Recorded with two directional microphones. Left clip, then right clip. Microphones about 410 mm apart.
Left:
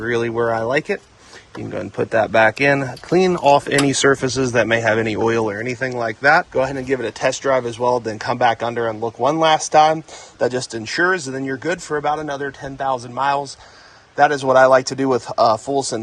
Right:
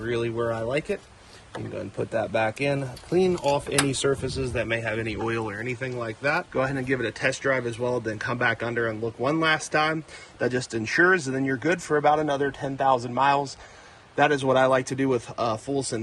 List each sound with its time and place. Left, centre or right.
0.0 s speech: centre
2.1 s speech: centre